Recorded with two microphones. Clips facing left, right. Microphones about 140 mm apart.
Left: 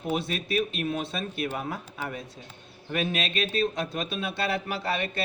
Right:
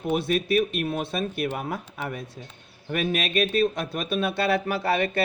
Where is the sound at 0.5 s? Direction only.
45° right (ahead or behind).